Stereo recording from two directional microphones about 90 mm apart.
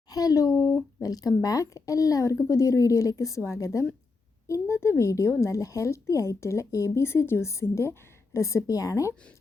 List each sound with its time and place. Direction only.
0.1 s a sound: 45° left (ahead or behind)
0.6 s speech: 25° left (ahead or behind)
1.0 s speech: 40° left (ahead or behind)